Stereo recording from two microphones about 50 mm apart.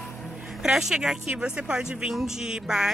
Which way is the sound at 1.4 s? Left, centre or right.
Centre.